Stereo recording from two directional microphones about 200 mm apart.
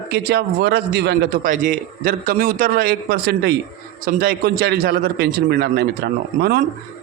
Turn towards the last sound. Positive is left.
turn(degrees=-50)  # may be behind; listen again after turning